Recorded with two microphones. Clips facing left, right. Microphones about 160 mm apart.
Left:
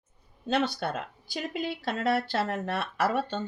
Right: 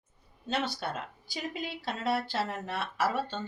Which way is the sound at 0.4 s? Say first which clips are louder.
Left 5 dB; 60° left (ahead or behind).